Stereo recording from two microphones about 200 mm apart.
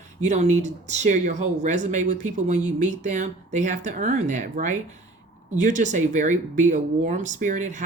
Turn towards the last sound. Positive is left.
turn(degrees=-40)  # may be behind; listen again after turning